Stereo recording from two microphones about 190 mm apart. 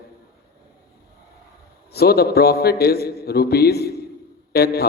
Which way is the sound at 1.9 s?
55° left (ahead or behind).